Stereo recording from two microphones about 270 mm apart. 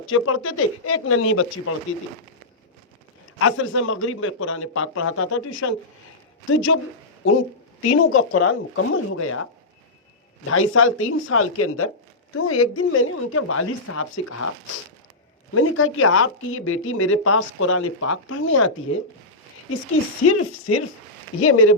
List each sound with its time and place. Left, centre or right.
0.1 s speech: left
3.3 s speech: left
7.9 s a woman's voice: left
15.5 s speech: left
20.2 s a woman's voice: left